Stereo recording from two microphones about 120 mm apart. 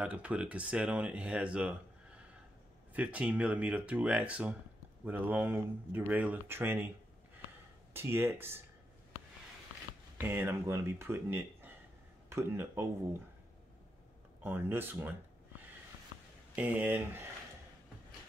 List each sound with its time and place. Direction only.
0.0 s speech: 10° right (ahead or behind)
7.9 s speech: 20° right (ahead or behind)
10.1 s speech: 20° right (ahead or behind)
14.4 s speech: 15° right (ahead or behind)
16.5 s speech: 15° right (ahead or behind)